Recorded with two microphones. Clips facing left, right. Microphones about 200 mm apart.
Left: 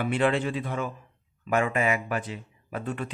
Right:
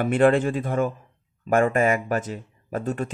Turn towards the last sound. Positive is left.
turn(degrees=-45)  # may be behind; listen again after turning